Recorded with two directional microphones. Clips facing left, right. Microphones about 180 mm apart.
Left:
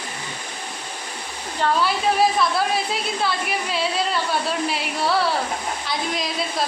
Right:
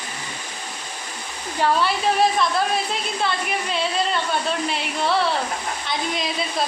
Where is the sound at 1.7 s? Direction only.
Centre (ahead or behind).